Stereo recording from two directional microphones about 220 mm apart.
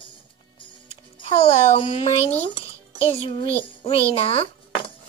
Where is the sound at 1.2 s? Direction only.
25° left (ahead or behind).